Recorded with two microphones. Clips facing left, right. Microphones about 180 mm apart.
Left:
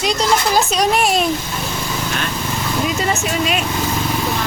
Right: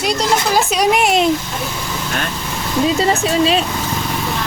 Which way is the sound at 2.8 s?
30° right (ahead or behind).